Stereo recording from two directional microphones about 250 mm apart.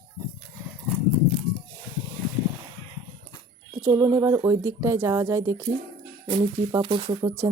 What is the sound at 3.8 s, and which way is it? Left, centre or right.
Speech, centre.